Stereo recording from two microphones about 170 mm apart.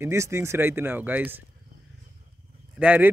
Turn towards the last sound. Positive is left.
turn(degrees=-5)  # may be behind; listen again after turning